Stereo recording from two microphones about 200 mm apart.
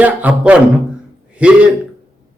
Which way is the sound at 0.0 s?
5° right (ahead or behind).